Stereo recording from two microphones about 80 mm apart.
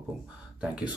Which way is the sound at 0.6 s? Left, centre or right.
Centre.